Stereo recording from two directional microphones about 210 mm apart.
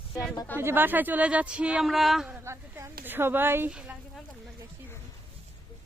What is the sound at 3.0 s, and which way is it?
A woman's voice, 10° right (ahead or behind).